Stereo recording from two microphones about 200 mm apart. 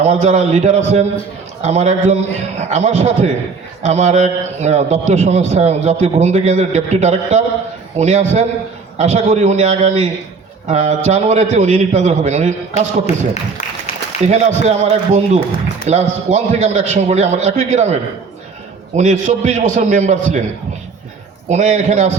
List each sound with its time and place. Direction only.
0.0 s a man's voice: 35° right (ahead or behind)
14.3 s a man's voice: 35° right (ahead or behind)
18.9 s a man's voice: 35° right (ahead or behind)
21.5 s a man's voice: 35° right (ahead or behind)